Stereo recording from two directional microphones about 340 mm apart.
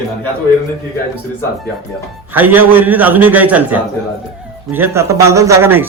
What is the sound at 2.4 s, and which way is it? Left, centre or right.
A man's voice, centre.